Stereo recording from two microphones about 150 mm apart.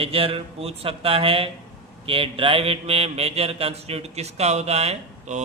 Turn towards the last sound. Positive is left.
turn(degrees=-50)  # may be behind; listen again after turning